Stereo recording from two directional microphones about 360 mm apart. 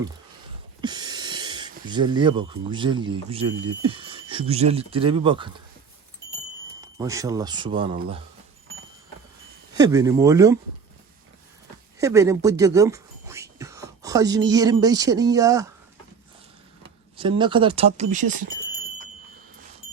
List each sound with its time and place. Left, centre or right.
0.8 s speech: centre
6.8 s speech: centre
9.7 s speech: centre
11.9 s speech: centre
17.2 s speech: centre